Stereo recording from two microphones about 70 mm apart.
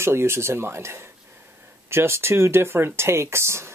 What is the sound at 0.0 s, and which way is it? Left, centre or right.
Speech, right.